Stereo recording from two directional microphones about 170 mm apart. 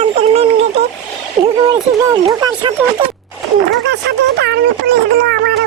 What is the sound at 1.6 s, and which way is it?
Speech, 25° right (ahead or behind).